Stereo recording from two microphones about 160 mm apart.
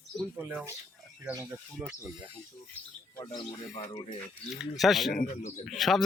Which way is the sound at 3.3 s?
40° left (ahead or behind).